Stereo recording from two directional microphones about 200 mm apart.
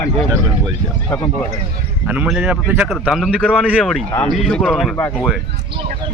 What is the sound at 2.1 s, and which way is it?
Speech, 5° right (ahead or behind).